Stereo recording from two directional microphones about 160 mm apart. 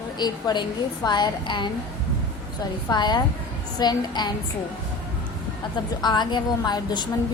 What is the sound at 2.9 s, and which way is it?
A woman's voice, 25° left (ahead or behind).